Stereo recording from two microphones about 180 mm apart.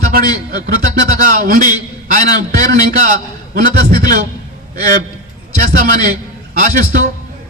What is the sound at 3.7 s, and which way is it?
Speech, 55° right (ahead or behind).